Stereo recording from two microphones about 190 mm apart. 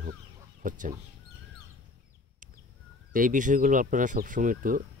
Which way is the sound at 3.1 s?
45° right (ahead or behind).